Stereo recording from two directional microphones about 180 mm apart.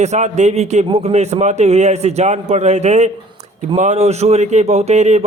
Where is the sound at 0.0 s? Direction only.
40° right (ahead or behind).